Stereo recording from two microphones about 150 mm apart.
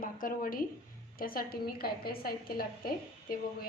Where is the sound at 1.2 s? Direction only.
75° left (ahead or behind).